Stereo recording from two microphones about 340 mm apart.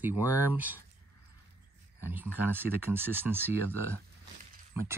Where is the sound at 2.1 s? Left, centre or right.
Centre.